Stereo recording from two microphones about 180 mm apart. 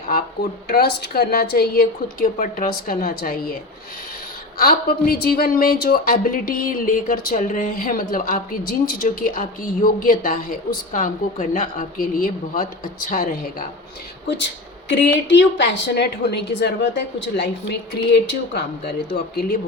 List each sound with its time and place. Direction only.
0.7 s a woman's voice: 60° left (ahead or behind)
4.5 s a woman's voice: 55° left (ahead or behind)
14.3 s a woman's voice: 85° left
19.1 s a woman's voice: 60° left (ahead or behind)